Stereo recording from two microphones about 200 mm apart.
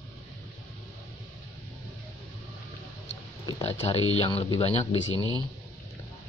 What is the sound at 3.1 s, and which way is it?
Oink, 25° left (ahead or behind).